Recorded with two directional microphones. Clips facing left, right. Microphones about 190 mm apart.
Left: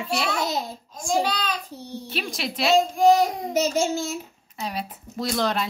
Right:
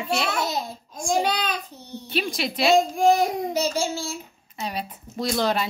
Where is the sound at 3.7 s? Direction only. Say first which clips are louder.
Left 3 dB; 20° left (ahead or behind).